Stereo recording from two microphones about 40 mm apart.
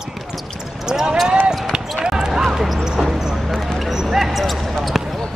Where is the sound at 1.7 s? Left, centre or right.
Centre.